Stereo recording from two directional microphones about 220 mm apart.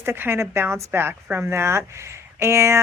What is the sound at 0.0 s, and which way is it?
Speech, 10° right (ahead or behind).